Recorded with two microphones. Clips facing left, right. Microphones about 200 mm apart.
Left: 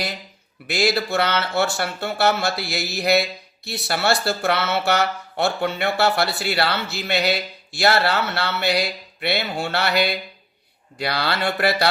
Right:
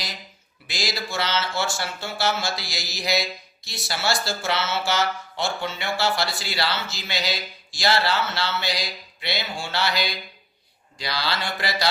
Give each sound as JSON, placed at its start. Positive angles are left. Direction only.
{"t": 0.7, "sound": "speech", "side_deg": 60}